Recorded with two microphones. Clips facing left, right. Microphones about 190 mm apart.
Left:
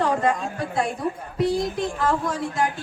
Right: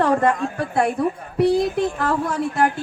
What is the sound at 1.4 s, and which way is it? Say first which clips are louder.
Speech: right 6 dB; 60° right (ahead or behind).